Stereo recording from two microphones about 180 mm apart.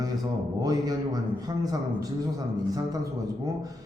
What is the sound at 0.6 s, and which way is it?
A man's voice, 20° right (ahead or behind).